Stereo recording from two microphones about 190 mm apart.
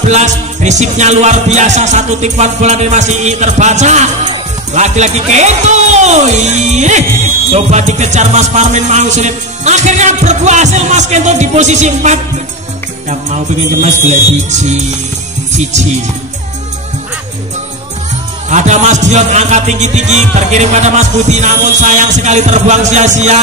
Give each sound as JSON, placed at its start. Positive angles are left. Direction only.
{"t": 0.1, "sound": "music", "side_deg": -35}
{"t": 18.5, "sound": "music", "side_deg": -40}